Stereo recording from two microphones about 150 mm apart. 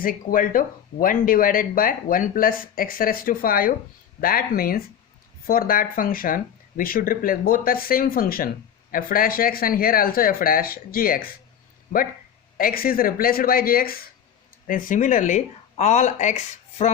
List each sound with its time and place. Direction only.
0.0 s speech: 70° left (ahead or behind)
12.5 s speech: 75° left (ahead or behind)
14.7 s speech: 65° left (ahead or behind)